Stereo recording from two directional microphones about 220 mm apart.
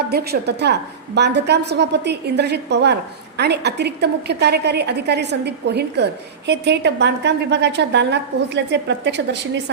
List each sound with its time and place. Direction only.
0.1 s a woman's voice: 45° right (ahead or behind)